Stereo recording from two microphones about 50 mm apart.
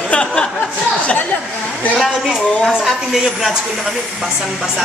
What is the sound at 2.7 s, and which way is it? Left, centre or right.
Speech, centre.